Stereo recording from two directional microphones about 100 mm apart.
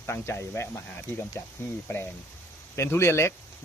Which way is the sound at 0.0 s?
25° left (ahead or behind).